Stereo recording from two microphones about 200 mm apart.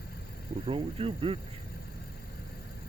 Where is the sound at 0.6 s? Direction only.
30° right (ahead or behind).